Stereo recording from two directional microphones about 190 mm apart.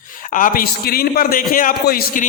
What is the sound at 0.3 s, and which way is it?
A man's voice, 45° left (ahead or behind).